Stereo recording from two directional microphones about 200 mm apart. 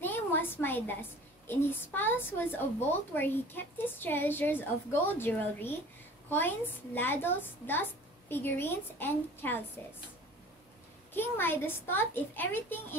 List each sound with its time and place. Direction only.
0.0 s a sound: 10° left (ahead or behind)
1.5 s a woman's voice: 10° left (ahead or behind)
11.1 s a woman's voice: 10° left (ahead or behind)